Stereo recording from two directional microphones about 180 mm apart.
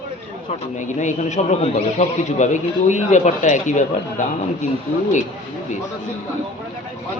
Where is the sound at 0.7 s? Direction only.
40° left (ahead or behind).